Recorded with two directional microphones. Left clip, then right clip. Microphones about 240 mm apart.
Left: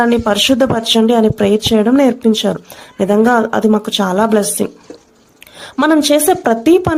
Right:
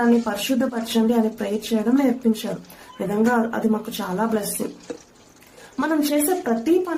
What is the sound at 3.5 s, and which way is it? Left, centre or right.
Speech, left.